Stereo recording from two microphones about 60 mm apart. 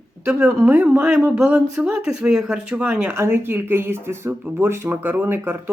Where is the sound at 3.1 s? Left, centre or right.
Right.